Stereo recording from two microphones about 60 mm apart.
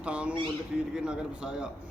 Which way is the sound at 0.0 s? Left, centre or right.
Centre.